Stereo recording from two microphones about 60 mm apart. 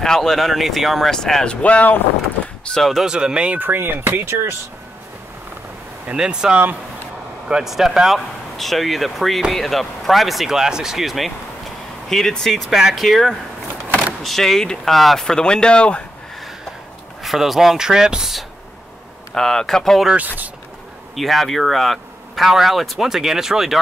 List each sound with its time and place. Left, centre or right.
0.0 s speech: centre; by 2.0 s left
2.7 s speech: centre
3.0 s speech: centre
3.5 s speech: right
6.0 s speech: centre
12.6 s speech: centre
12.9 s speech: centre
17.2 s speech: centre
19.3 s speech: centre
21.1 s speech: centre